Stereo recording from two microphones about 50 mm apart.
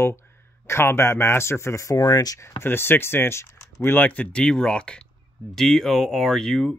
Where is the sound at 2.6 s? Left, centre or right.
Left.